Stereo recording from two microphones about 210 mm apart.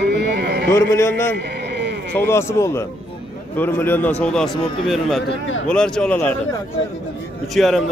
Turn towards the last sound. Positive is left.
turn(degrees=0)  # may be behind; listen again after turning